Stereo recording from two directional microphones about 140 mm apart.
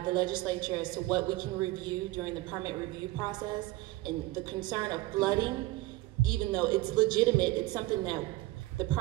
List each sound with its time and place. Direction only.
0.0 s a woman's voice: 30° right (ahead or behind)